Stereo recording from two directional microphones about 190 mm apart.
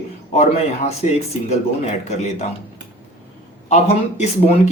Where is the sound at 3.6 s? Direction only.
35° left (ahead or behind).